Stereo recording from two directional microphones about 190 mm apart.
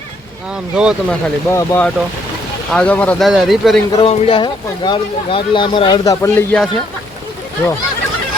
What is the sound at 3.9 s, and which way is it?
Speech, 25° left (ahead or behind).